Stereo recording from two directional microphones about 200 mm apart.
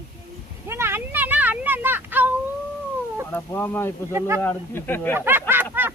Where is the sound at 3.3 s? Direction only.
10° left (ahead or behind).